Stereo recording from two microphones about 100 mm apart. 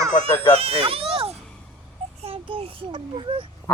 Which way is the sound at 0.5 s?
70° right (ahead or behind).